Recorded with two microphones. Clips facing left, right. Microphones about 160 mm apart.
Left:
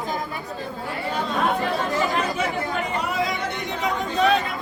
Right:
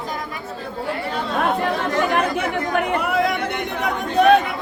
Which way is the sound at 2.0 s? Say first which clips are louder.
Right 3 dB; 60° right (ahead or behind).